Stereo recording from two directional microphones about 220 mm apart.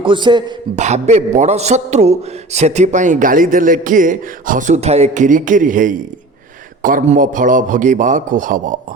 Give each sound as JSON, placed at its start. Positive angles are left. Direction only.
{"t": 0.0, "sound": "a man's voice", "side_deg": -20}
{"t": 0.8, "sound": "speech", "side_deg": -30}